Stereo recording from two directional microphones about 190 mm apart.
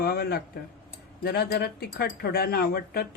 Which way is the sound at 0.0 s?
55° left (ahead or behind).